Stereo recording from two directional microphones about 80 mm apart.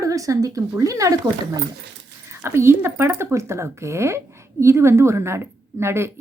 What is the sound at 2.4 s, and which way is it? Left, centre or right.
Speech, right.